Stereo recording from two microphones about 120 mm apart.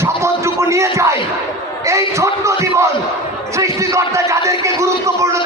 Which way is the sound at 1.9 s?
25° right (ahead or behind).